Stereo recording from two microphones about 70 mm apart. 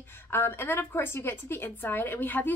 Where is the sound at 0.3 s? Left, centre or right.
Left.